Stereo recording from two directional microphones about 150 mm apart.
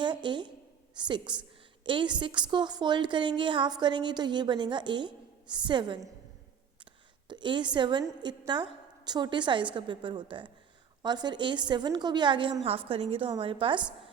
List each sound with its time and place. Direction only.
0.0 s a woman's voice: 30° right (ahead or behind)
7.3 s a woman's voice: 30° right (ahead or behind)